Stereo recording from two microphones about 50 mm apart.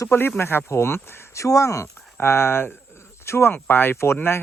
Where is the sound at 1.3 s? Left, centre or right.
Left.